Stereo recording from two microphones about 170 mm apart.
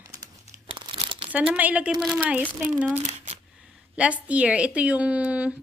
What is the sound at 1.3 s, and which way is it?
Speech, 10° right (ahead or behind).